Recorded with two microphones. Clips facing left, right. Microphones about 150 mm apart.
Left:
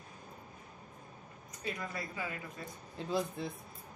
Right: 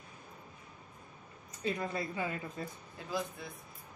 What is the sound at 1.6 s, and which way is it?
Speech, 25° right (ahead or behind).